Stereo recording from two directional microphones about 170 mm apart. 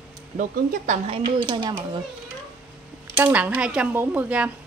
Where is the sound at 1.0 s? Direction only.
30° right (ahead or behind).